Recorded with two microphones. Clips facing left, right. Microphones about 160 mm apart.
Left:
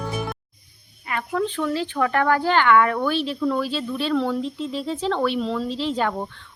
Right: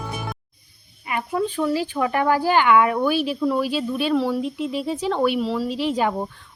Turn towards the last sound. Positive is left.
turn(degrees=-10)  # may be behind; listen again after turning